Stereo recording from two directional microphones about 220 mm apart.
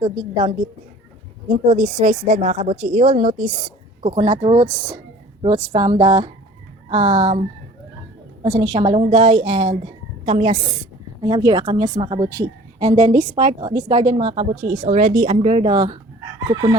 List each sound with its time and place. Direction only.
0.0 s a woman's voice: 20° right (ahead or behind)
1.5 s a woman's voice: 35° right (ahead or behind); by 16.7 s 20° right (ahead or behind)